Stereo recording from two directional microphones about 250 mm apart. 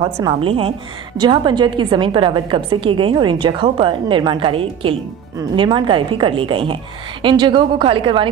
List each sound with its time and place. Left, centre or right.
0.0 s a woman's voice: centre